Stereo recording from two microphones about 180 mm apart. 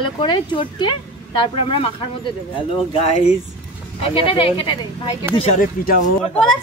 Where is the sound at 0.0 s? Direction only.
25° left (ahead or behind).